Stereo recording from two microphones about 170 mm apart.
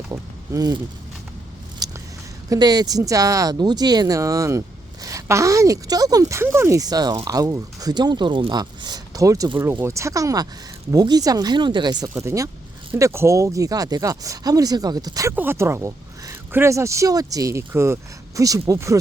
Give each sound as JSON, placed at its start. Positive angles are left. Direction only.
{"t": 0.1, "sound": "a sound", "side_deg": -20}
{"t": 1.8, "sound": "biting", "side_deg": -20}
{"t": 2.5, "sound": "speech", "side_deg": -25}